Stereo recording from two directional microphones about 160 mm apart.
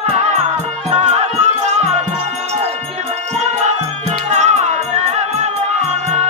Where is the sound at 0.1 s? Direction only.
45° right (ahead or behind).